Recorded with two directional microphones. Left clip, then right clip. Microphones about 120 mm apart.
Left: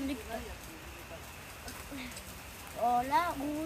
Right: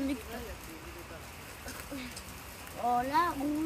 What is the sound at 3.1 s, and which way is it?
Speech, 20° left (ahead or behind).